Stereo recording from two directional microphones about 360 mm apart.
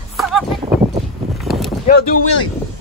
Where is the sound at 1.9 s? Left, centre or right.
Centre.